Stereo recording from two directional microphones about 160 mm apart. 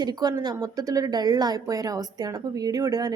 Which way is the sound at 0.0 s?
25° right (ahead or behind).